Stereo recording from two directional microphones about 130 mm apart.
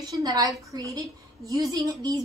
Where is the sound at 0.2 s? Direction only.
30° right (ahead or behind).